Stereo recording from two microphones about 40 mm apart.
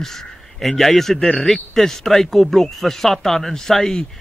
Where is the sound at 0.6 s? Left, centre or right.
Centre.